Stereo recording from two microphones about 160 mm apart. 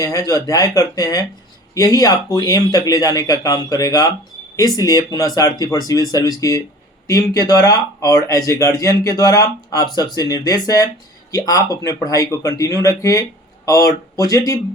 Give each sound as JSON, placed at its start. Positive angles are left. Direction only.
{"t": 0.0, "sound": "speech", "side_deg": 20}